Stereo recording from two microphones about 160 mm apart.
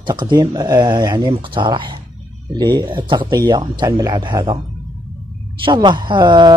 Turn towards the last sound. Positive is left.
turn(degrees=-30)  # may be behind; listen again after turning